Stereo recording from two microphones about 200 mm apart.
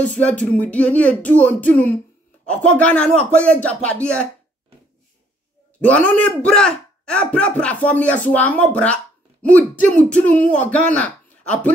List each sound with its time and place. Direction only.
0.0 s a man's voice: 5° left (ahead or behind)
5.8 s a man's voice: 5° left (ahead or behind)